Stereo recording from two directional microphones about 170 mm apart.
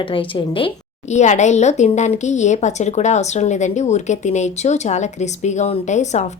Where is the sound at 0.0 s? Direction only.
30° left (ahead or behind).